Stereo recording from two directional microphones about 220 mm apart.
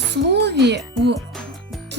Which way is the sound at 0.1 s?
50° right (ahead or behind).